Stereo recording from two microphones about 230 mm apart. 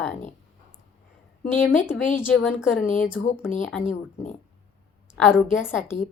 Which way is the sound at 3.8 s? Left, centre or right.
Left.